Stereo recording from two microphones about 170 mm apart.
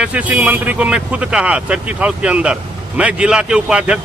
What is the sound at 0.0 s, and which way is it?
Speech, 10° right (ahead or behind).